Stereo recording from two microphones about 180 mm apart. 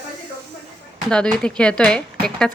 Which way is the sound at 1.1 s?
5° left (ahead or behind).